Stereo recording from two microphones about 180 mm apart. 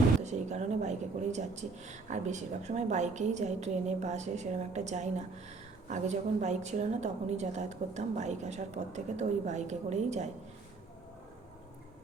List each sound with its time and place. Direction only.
0.2 s speech: 40° right (ahead or behind)